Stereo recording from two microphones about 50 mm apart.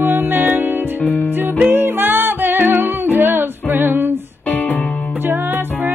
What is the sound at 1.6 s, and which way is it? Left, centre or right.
Music, right.